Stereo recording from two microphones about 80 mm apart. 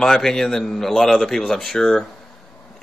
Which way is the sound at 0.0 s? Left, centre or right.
Centre.